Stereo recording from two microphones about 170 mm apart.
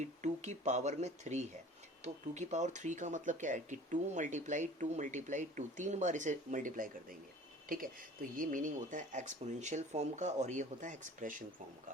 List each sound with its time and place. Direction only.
0.0 s speech: 45° right (ahead or behind)